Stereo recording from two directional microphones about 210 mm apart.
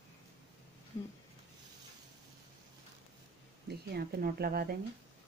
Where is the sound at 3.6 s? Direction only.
50° right (ahead or behind).